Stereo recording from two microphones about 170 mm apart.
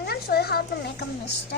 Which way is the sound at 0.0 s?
65° left (ahead or behind).